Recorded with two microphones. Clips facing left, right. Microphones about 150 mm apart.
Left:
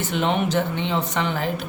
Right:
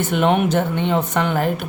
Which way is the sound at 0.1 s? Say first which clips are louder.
Right 4 dB; 55° right (ahead or behind).